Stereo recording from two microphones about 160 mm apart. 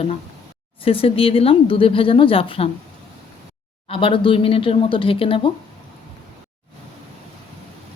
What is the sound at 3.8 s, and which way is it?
Speech, 35° left (ahead or behind).